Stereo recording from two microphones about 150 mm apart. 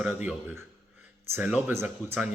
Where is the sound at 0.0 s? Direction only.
5° right (ahead or behind).